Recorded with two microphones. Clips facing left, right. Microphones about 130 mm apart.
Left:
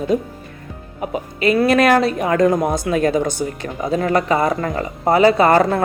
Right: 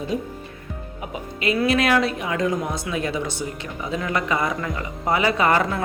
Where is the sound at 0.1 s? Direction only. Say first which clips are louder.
Left 7 dB; 45° left (ahead or behind).